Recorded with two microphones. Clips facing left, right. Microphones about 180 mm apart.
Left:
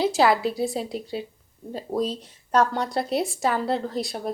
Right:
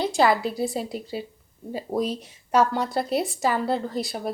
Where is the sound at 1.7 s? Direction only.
10° right (ahead or behind).